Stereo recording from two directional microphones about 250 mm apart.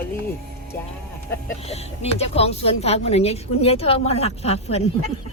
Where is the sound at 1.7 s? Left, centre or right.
Left.